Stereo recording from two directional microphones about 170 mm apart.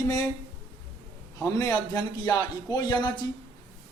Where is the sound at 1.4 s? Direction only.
20° left (ahead or behind).